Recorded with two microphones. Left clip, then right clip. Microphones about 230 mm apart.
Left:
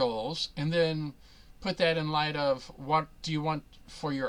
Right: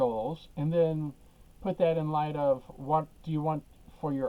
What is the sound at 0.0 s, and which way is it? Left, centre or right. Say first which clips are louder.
Speech: even; left.